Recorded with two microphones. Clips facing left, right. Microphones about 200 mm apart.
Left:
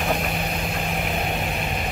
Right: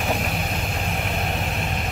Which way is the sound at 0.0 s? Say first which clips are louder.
Left 1 dB; centre (ahead or behind).